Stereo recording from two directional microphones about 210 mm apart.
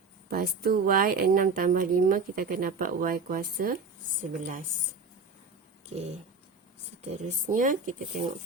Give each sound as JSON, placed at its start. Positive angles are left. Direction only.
{"t": 0.3, "sound": "a woman's voice", "side_deg": -45}
{"t": 7.1, "sound": "speech", "side_deg": -35}